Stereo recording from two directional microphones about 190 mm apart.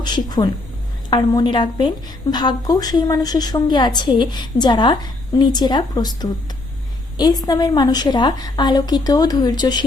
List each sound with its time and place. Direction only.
0.0 s a woman's voice: 20° left (ahead or behind)